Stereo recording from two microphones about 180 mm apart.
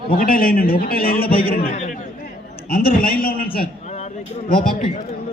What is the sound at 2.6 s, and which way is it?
A man's voice, 55° left (ahead or behind).